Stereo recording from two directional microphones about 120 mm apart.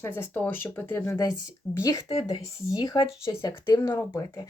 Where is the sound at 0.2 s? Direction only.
15° left (ahead or behind).